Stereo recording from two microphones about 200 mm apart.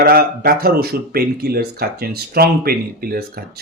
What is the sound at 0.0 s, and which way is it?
Speech, 50° right (ahead or behind).